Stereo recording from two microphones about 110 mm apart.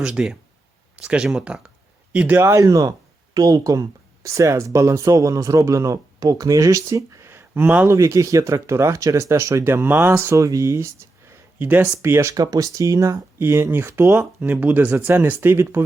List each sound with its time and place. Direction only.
0.0 s speech: 5° right (ahead or behind)
2.1 s speech: 15° right (ahead or behind)
2.6 s speech: 35° right (ahead or behind); by 7.9 s 15° right (ahead or behind)
7.9 s speech: 30° right (ahead or behind)